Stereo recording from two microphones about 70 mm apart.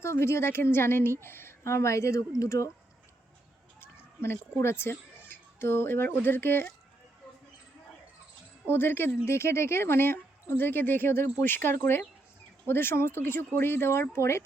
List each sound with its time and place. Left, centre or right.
0.0 s a woman's voice: left
3.8 s speech: left
8.6 s speech: left